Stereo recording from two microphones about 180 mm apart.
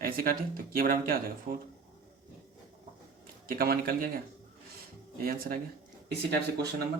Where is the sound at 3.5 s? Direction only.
55° right (ahead or behind).